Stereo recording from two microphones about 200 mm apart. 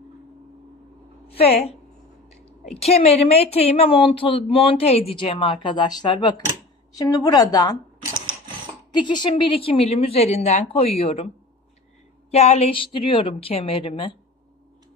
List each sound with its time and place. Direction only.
1.2 s a woman's voice: 30° left (ahead or behind)
8.9 s a woman's voice: 25° left (ahead or behind)
12.3 s a woman's voice: 30° left (ahead or behind)